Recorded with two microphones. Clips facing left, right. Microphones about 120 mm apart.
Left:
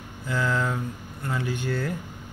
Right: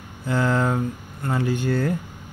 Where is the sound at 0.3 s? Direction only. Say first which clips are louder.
Right 5 dB; 30° right (ahead or behind).